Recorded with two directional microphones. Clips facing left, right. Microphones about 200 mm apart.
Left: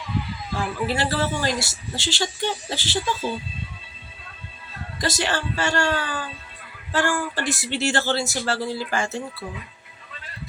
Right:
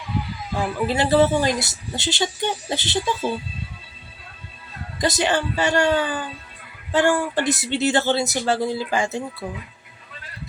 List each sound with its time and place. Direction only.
0.5 s a woman's voice: 20° right (ahead or behind)
4.9 s a woman's voice: 20° right (ahead or behind)